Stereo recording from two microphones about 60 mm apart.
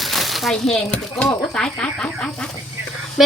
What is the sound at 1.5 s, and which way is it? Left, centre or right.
Speech, centre.